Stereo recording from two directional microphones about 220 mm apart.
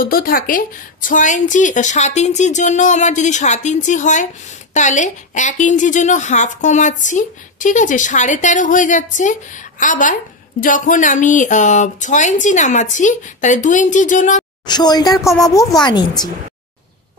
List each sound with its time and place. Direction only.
0.0 s a woman's voice: 40° left (ahead or behind)
14.7 s a woman's voice: 20° left (ahead or behind)